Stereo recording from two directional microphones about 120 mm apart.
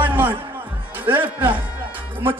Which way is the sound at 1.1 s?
15° right (ahead or behind).